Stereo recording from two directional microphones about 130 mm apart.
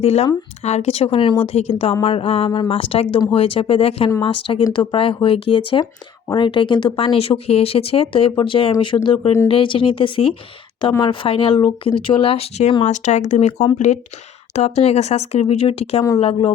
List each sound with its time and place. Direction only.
0.0 s speech: 55° left (ahead or behind)
8.9 s speech: 25° left (ahead or behind)
9.5 s speech: 45° left (ahead or behind)
12.8 s speech: 65° left (ahead or behind); by 16.5 s 45° left (ahead or behind)